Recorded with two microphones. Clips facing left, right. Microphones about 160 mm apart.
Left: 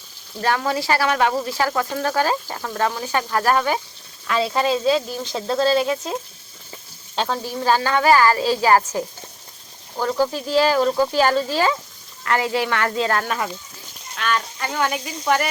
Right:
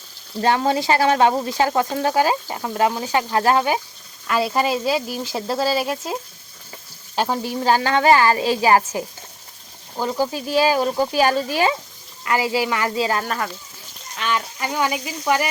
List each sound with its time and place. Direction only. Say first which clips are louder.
0.4 s speech: right 3 dB; 25° right (ahead or behind)
4.3 s speech: even; 5° right (ahead or behind)
7.2 s a woman's voice: right 2 dB; 15° right (ahead or behind)